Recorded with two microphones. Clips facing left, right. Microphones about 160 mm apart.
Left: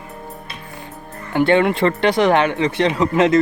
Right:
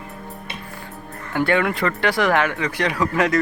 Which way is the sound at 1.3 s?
20° left (ahead or behind).